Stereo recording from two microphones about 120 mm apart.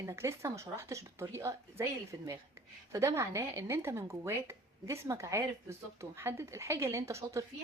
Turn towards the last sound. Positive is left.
turn(degrees=-25)  # may be behind; listen again after turning